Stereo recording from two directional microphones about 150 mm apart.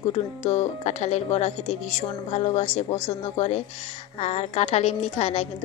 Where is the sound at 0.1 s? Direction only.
50° left (ahead or behind).